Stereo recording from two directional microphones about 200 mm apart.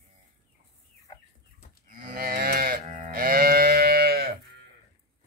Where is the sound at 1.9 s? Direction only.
45° right (ahead or behind).